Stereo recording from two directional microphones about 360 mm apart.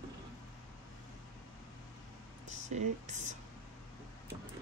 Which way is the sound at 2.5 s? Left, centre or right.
Centre.